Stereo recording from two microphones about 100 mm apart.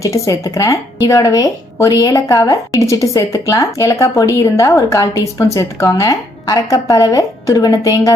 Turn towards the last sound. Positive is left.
turn(degrees=35)  # may be behind; listen again after turning